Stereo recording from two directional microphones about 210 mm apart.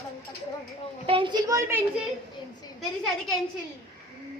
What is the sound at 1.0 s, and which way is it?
Speech, 25° right (ahead or behind).